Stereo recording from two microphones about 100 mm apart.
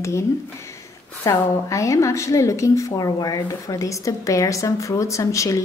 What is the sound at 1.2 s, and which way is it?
A woman's voice, 30° left (ahead or behind).